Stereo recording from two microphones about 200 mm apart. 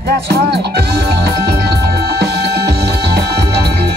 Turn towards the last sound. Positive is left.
turn(degrees=-55)  # may be behind; listen again after turning